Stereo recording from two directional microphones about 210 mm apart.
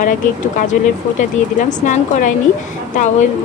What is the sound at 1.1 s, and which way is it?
Speech, 35° left (ahead or behind).